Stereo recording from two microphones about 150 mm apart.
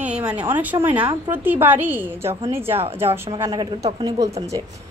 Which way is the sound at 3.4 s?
25° right (ahead or behind).